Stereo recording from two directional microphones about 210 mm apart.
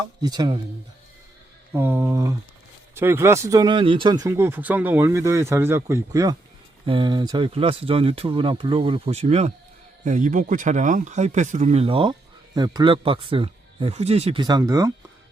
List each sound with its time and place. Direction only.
0.2 s speech: 20° right (ahead or behind)
1.7 s speech: 10° right (ahead or behind)